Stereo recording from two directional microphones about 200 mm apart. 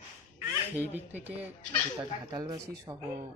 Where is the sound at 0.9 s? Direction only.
10° right (ahead or behind).